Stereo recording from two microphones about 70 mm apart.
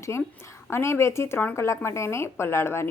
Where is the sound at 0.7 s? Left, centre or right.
Left.